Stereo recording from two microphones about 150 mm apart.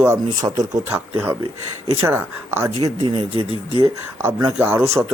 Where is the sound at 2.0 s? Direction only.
15° right (ahead or behind).